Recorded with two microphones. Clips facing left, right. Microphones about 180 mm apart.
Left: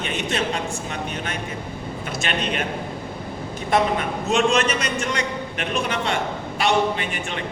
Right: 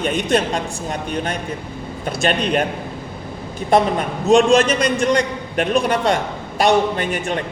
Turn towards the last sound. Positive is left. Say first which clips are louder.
# right 6 dB
turn(degrees=-40)  # may be behind; listen again after turning